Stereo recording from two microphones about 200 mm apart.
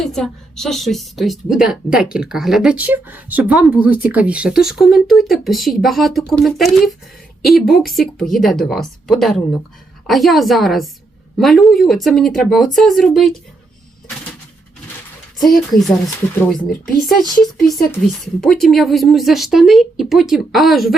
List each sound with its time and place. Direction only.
0.0 s a woman's voice: centre (ahead or behind)
16.6 s speech: 45° left (ahead or behind)
17.4 s a woman's voice: centre (ahead or behind)